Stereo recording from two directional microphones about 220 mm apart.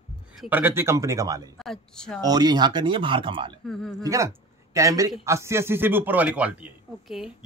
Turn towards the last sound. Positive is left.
turn(degrees=-5)  # may be behind; listen again after turning